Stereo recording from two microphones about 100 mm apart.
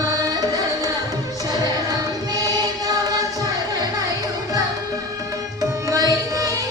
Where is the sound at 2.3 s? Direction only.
40° right (ahead or behind).